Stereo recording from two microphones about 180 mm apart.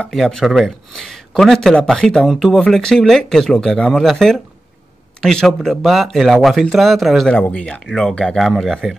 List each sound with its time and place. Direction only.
0.0 s a man's voice: centre (ahead or behind)